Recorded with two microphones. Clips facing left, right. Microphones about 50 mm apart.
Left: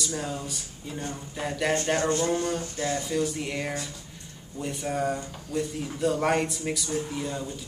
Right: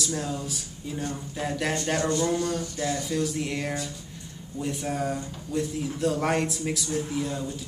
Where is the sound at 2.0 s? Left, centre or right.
Left.